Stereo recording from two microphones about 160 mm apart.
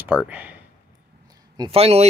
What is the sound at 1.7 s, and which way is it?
Speech, 40° right (ahead or behind).